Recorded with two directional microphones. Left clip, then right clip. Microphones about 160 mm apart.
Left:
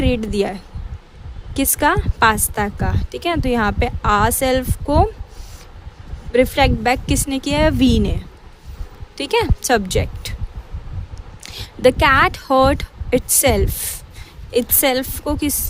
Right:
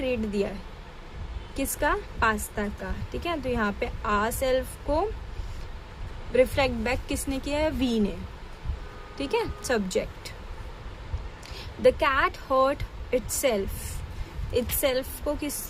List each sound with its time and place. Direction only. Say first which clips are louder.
0.0 s a woman's voice: left 8 dB; 55° left (ahead or behind)
1.5 s a woman's voice: left 10 dB; 60° left (ahead or behind)
6.3 s a woman's voice: left 7 dB; 50° left (ahead or behind)
9.1 s a woman's voice: left 10 dB; 55° left (ahead or behind)
11.4 s a woman's voice: left 7 dB; 60° left (ahead or behind)